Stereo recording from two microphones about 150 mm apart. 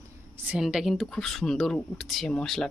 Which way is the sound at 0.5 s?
5° right (ahead or behind).